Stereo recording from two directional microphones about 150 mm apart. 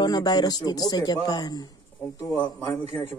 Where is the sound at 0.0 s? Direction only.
30° left (ahead or behind).